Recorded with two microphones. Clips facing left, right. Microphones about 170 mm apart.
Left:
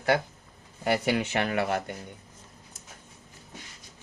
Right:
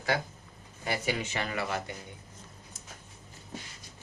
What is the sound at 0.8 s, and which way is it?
Speech, 70° left (ahead or behind).